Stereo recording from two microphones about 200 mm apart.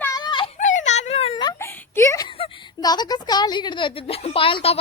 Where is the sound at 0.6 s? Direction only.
40° left (ahead or behind); by 1.7 s 20° left (ahead or behind).